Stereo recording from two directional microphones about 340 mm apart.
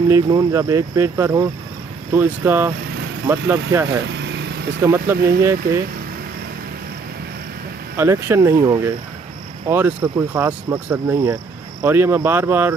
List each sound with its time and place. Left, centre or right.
0.1 s speech: centre
4.0 s vehicle: right
4.8 s speech: centre
7.9 s speech: centre